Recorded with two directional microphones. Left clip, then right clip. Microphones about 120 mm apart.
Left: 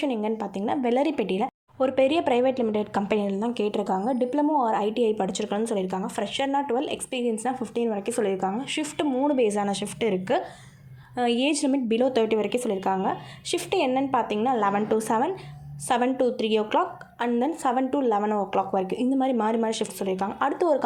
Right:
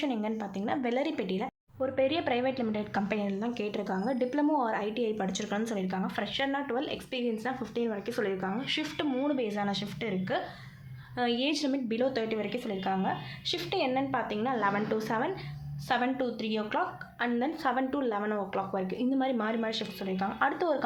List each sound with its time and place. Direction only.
0.0 s a woman's voice: 45° left (ahead or behind)
4.0 s a woman's voice: 30° left (ahead or behind); by 8.4 s 45° left (ahead or behind)
8.4 s a woman's voice: 30° left (ahead or behind)
9.4 s speech: 55° left (ahead or behind)
15.9 s a woman's voice: 50° left (ahead or behind)
16.4 s speech: 60° left (ahead or behind)
17.2 s a woman's voice: 45° left (ahead or behind)
18.5 s a woman's voice: 60° left (ahead or behind)
20.4 s a woman's voice: 45° left (ahead or behind)